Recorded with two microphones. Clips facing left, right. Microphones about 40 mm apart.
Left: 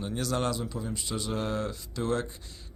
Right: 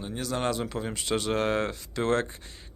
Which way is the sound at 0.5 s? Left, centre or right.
Right.